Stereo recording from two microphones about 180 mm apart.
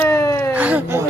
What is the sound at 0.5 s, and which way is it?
Speech, 10° right (ahead or behind).